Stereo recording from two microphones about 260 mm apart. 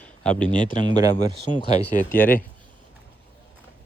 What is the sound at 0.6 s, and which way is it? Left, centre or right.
Speech, centre.